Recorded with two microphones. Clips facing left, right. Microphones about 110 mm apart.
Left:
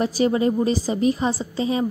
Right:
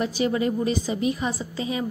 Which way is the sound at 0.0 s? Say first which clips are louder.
Left 4 dB; 40° left (ahead or behind).